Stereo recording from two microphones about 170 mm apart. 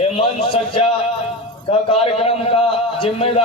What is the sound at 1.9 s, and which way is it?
A man's voice, 35° left (ahead or behind).